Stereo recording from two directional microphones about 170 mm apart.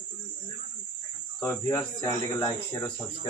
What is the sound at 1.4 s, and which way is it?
Speech, 20° left (ahead or behind).